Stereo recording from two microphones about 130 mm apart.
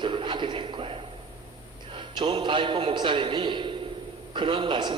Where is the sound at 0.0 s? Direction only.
40° right (ahead or behind).